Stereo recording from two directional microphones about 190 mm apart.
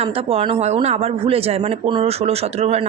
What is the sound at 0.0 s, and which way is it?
Speech, 30° right (ahead or behind).